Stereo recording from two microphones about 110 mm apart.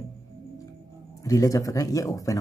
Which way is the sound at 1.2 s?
30° left (ahead or behind).